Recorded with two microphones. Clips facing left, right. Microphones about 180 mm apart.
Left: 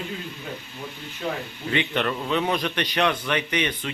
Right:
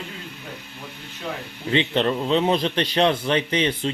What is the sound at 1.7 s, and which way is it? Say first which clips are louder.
A man's voice: right 4 dB; 30° right (ahead or behind).